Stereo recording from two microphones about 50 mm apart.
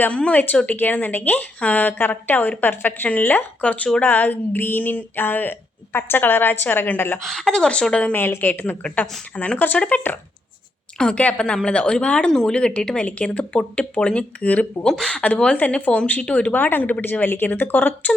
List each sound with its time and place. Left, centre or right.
0.1 s speech: left
7.2 s speech: centre
8.1 s a woman's voice: left
10.9 s a woman's voice: centre
14.8 s speech: centre
15.1 s speech: left
16.5 s speech: left